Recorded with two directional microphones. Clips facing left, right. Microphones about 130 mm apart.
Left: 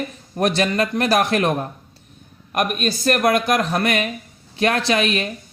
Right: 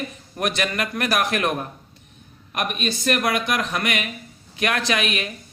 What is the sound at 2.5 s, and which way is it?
Speech, 45° left (ahead or behind).